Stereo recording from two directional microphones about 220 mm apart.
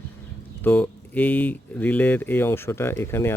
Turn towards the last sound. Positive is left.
turn(degrees=10)  # may be behind; listen again after turning